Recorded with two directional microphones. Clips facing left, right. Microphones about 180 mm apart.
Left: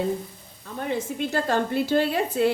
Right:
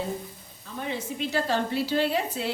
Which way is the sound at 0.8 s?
50° left (ahead or behind).